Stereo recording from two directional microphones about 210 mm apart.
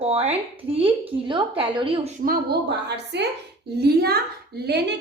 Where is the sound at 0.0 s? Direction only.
30° right (ahead or behind).